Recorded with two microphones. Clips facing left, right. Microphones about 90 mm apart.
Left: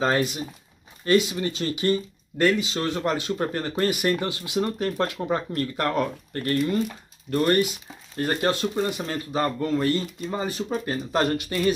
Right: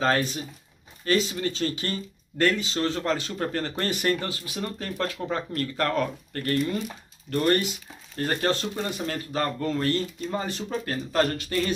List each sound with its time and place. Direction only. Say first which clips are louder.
0.0 s speech: left 1 dB; 15° left (ahead or behind)
8.2 s speech: left 2 dB; 15° left (ahead or behind)